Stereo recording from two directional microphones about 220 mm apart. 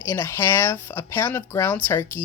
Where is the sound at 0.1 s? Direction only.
10° left (ahead or behind).